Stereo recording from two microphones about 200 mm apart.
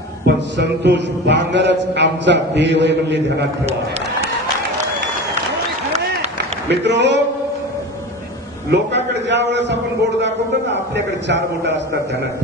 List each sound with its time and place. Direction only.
0.6 s speech: 60° right (ahead or behind)
6.7 s speech: 60° right (ahead or behind)
8.6 s speech: 60° right (ahead or behind)